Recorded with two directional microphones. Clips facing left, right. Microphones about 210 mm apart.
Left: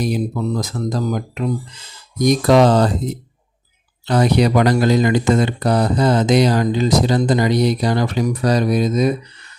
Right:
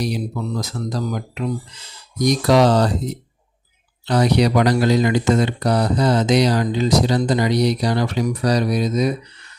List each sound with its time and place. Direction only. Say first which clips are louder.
0.6 s speech: left 3 dB; 50° left (ahead or behind)
4.0 s speech: left 1 dB; 50° left (ahead or behind)